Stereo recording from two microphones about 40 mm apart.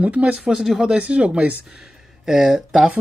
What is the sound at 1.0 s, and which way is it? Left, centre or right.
Speech, right.